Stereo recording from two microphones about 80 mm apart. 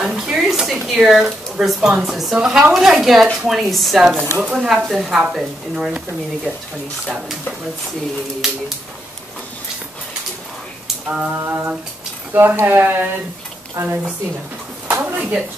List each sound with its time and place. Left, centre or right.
0.0 s a sound: centre
2.3 s a woman's voice: centre
7.1 s speech: centre
8.4 s a woman's voice: centre
11.3 s a woman's voice: right
14.9 s a sound: right